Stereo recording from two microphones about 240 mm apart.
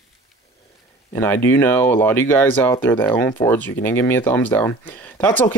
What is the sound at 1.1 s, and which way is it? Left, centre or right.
Speech, centre.